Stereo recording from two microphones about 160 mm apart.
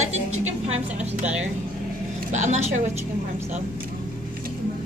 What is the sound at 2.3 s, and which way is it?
Speech, 50° right (ahead or behind).